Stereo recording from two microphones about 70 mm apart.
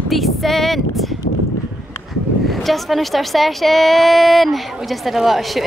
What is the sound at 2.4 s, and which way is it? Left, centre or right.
A woman's voice, centre.